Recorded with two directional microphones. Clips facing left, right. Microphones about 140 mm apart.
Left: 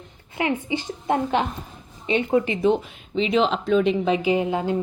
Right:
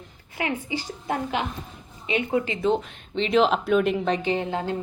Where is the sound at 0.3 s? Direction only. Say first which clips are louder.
Left 4 dB; 20° left (ahead or behind).